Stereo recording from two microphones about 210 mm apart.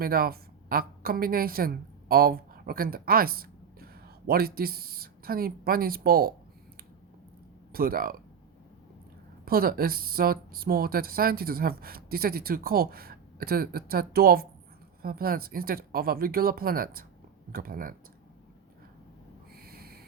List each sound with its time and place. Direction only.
0.0 s a woman's voice: 45° right (ahead or behind)
7.7 s speech: 45° right (ahead or behind)
9.5 s speech: 45° right (ahead or behind)
19.5 s a sound: 45° right (ahead or behind)